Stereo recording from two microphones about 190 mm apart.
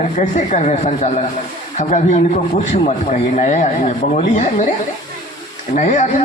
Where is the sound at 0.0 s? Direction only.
40° left (ahead or behind).